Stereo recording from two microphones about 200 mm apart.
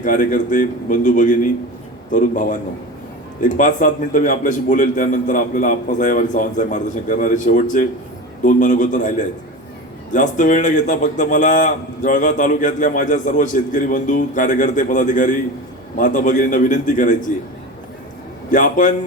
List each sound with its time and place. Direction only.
0.0 s a man's voice: 40° left (ahead or behind)
3.6 s a man's voice: 40° left (ahead or behind)
18.5 s a man's voice: 40° left (ahead or behind)